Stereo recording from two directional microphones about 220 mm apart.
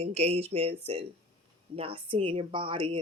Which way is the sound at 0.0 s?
30° right (ahead or behind).